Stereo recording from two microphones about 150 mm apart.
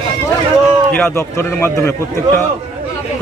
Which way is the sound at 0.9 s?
15° left (ahead or behind).